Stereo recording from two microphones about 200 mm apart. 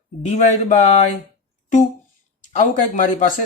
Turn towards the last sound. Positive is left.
turn(degrees=40)  # may be behind; listen again after turning